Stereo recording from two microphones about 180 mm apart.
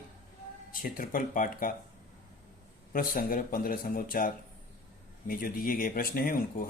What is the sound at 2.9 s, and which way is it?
Speech, 50° left (ahead or behind).